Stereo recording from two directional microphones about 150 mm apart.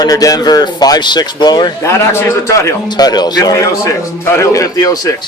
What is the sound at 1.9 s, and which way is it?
A man's voice, 15° left (ahead or behind).